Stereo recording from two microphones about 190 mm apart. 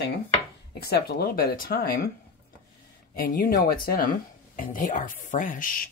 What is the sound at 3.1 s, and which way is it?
Speech, 50° left (ahead or behind).